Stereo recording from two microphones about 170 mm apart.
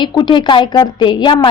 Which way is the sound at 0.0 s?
25° left (ahead or behind).